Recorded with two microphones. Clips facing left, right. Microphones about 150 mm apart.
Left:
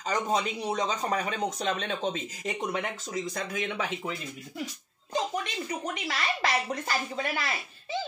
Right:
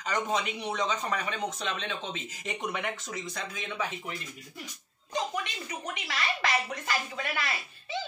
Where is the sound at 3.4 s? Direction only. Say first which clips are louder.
Even; 60° left (ahead or behind).